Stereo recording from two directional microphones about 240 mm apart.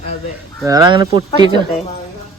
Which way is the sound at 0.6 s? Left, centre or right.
Centre.